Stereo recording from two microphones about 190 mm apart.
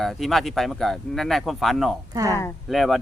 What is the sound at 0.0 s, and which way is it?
Speech, centre (ahead or behind).